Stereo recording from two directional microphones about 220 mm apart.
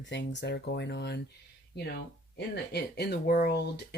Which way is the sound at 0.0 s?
55° left (ahead or behind).